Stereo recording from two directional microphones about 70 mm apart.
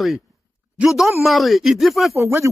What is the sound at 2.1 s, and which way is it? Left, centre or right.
Speech, right.